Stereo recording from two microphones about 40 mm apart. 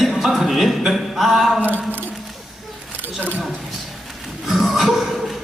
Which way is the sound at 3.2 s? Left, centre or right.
Left.